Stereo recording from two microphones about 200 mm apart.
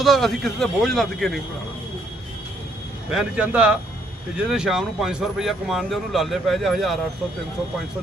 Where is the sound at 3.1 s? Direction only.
5° right (ahead or behind).